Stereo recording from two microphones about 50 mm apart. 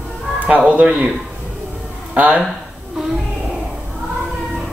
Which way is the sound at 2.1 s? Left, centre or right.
Right.